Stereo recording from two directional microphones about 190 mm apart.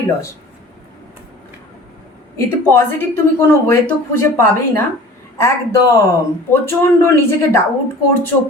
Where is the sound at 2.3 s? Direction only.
15° left (ahead or behind).